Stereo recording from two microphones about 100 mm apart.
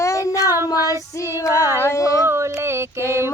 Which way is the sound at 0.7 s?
35° left (ahead or behind).